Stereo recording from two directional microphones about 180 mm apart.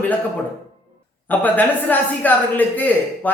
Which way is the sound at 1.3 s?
10° left (ahead or behind).